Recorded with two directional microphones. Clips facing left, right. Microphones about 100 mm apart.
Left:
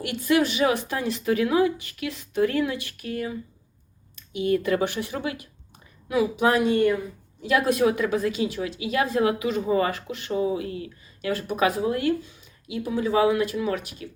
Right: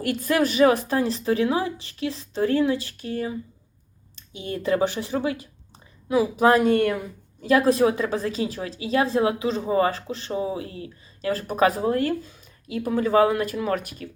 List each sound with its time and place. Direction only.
0.0 s a woman's voice: 40° right (ahead or behind)
7.4 s a woman's voice: 35° right (ahead or behind)